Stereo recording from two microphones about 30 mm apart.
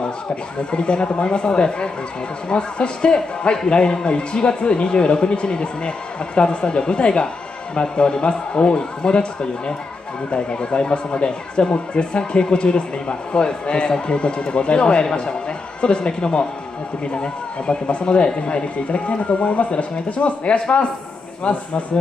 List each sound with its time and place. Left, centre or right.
0.7 s a man's voice: left